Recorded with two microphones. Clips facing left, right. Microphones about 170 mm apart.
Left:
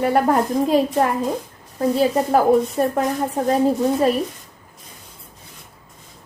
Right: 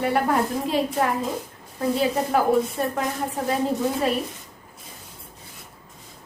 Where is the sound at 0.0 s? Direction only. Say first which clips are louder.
Left 4 dB; 40° left (ahead or behind).